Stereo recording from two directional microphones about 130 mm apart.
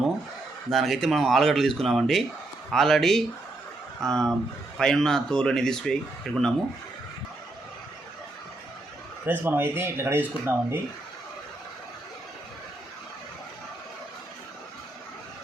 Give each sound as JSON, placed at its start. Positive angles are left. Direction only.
{"t": 0.7, "sound": "speech", "side_deg": 0}
{"t": 9.2, "sound": "speech", "side_deg": -15}